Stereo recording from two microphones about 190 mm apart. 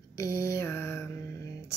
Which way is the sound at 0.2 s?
15° left (ahead or behind).